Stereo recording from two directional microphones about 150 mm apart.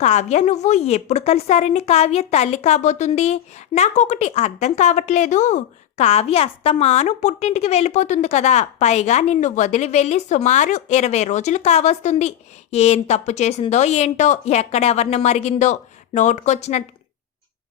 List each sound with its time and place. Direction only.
0.0 s a woman's voice: 50° left (ahead or behind)